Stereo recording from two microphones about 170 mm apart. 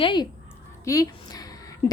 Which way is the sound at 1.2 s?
25° left (ahead or behind).